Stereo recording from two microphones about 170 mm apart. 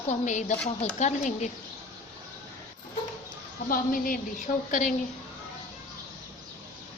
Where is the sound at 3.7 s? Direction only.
55° left (ahead or behind).